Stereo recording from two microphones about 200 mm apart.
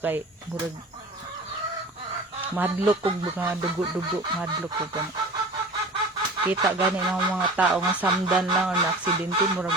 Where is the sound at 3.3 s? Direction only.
10° right (ahead or behind).